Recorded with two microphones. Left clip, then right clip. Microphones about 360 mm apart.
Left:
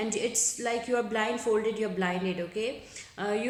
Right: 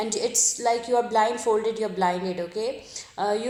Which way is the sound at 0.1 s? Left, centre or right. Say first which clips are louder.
Right 5 dB; centre.